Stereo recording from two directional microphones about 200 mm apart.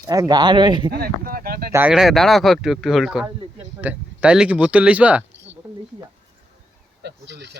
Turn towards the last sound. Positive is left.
turn(degrees=-60)  # may be behind; listen again after turning